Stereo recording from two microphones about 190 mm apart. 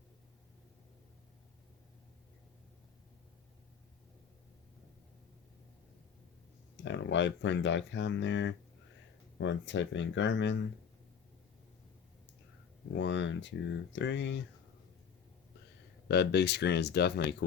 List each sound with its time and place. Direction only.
6.8 s speech: 75° left (ahead or behind)
12.9 s speech: 75° left (ahead or behind)
16.0 s speech: 60° left (ahead or behind)